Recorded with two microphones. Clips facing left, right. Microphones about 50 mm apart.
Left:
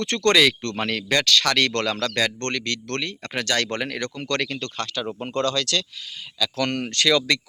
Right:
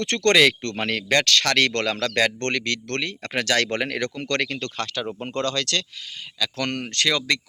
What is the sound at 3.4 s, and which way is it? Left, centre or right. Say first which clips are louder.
Speech: right 2 dB; right.